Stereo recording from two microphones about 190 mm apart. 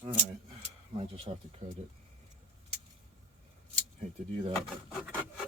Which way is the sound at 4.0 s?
30° right (ahead or behind).